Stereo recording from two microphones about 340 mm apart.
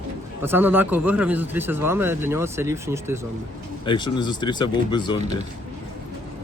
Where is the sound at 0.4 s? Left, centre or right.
Centre.